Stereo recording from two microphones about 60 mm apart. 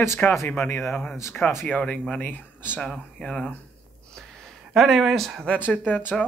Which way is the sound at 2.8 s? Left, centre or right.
Centre.